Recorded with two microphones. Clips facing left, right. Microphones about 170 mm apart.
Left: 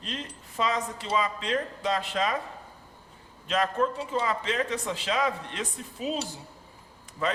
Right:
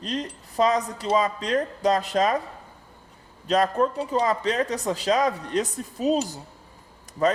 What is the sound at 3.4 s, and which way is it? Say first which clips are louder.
Speech: right 5 dB; 40° right (ahead or behind).